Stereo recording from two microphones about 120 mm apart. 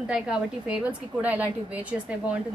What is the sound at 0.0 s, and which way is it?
A woman's voice, 5° right (ahead or behind).